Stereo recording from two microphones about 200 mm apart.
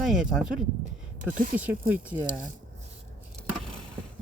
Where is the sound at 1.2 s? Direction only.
40° right (ahead or behind).